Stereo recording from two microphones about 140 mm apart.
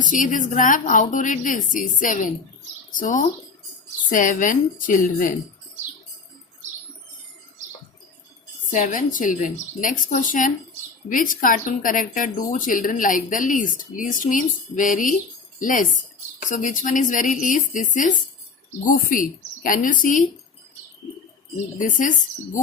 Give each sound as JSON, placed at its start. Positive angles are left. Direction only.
{"t": 0.0, "sound": "a woman's voice", "side_deg": 70}
{"t": 8.7, "sound": "a woman's voice", "side_deg": 65}
{"t": 21.8, "sound": "a woman's voice", "side_deg": 70}